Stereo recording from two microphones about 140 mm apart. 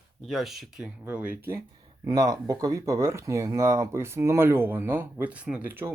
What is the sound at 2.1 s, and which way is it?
Speech, 25° right (ahead or behind).